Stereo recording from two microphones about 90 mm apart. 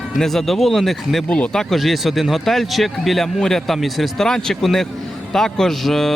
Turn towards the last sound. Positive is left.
turn(degrees=5)  # may be behind; listen again after turning